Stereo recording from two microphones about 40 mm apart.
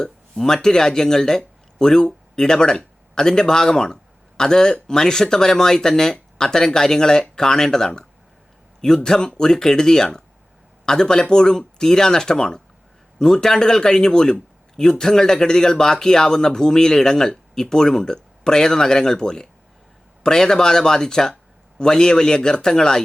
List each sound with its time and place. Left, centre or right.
0.0 s speech: centre
9.0 s a man's voice: centre